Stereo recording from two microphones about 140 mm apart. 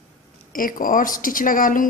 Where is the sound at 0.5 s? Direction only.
80° left.